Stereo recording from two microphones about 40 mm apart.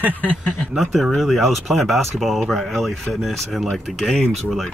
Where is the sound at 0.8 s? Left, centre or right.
Centre.